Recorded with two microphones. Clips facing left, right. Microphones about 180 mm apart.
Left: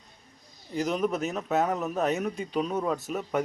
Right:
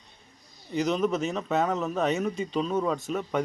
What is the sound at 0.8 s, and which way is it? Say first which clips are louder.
A man's voice: right 2 dB; 5° left (ahead or behind).